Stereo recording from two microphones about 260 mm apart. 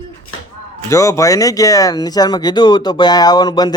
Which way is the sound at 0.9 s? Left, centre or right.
Centre.